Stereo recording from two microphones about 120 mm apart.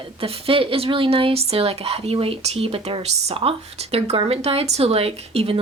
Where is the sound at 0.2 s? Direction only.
50° right (ahead or behind).